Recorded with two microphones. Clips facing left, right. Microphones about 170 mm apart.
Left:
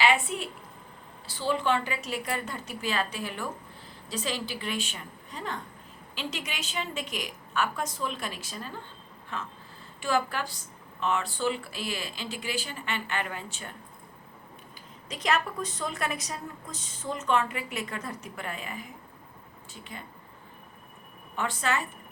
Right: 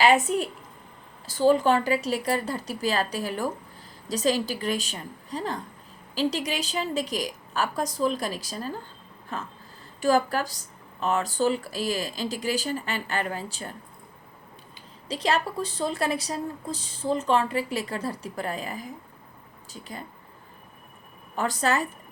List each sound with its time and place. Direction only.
0.0 s a woman's voice: 40° right (ahead or behind)
14.8 s a woman's voice: 30° right (ahead or behind)
21.3 s a woman's voice: 40° right (ahead or behind)